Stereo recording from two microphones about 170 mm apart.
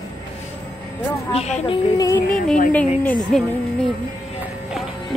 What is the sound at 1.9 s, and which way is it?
Speech, 20° left (ahead or behind).